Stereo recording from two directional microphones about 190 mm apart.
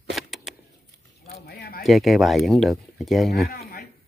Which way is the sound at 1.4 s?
55° left (ahead or behind).